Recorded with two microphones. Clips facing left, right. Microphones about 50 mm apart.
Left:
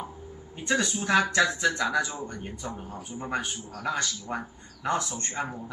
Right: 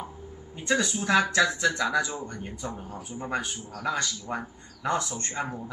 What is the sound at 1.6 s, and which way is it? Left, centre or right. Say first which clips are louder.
A man's voice: even; centre.